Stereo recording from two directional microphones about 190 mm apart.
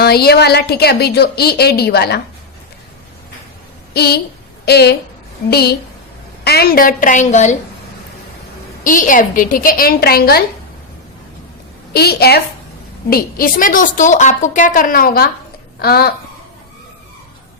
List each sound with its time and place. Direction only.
0.0 s a woman's voice: 55° left (ahead or behind)
3.9 s a woman's voice: 55° left (ahead or behind); by 7.5 s 40° left (ahead or behind)
8.8 s a woman's voice: 45° left (ahead or behind)
11.9 s a woman's voice: 55° left (ahead or behind)